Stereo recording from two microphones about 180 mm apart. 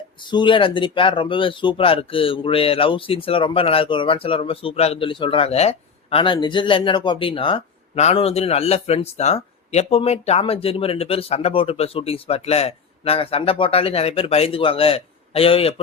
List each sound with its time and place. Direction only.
0.3 s speech: 25° left (ahead or behind)